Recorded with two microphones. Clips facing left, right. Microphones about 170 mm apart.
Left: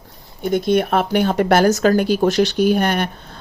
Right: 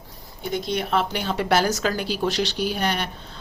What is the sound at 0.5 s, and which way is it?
Speech, 55° left (ahead or behind).